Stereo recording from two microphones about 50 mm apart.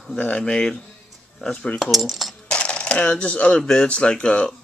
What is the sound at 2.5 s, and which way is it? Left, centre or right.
Speech, left.